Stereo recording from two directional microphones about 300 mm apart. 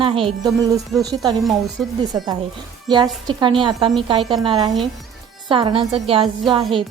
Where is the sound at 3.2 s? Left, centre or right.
Centre.